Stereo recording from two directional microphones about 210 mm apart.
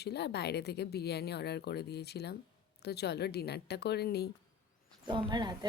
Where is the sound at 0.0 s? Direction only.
50° left (ahead or behind).